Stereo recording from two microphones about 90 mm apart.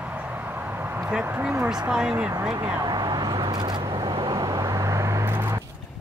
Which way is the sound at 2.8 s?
50° right (ahead or behind).